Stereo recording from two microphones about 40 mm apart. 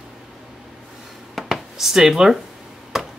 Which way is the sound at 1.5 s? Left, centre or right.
Centre.